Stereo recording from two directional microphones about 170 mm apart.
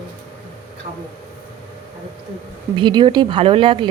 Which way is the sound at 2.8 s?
25° right (ahead or behind).